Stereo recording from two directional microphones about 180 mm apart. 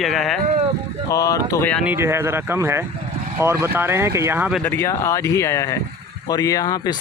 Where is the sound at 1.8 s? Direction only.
15° right (ahead or behind).